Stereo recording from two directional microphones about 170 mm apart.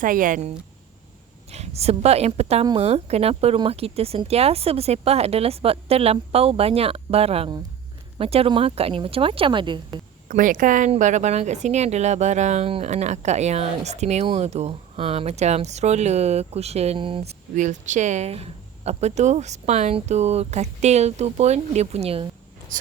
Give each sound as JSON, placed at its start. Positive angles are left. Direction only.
{"t": 0.0, "sound": "speech", "side_deg": -50}
{"t": 1.5, "sound": "speech", "side_deg": -40}
{"t": 10.2, "sound": "speech", "side_deg": -50}
{"t": 17.6, "sound": "speech", "side_deg": -45}
{"t": 22.7, "sound": "speech", "side_deg": -50}